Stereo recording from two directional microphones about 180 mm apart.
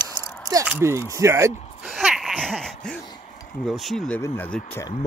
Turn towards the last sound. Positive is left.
turn(degrees=5)  # may be behind; listen again after turning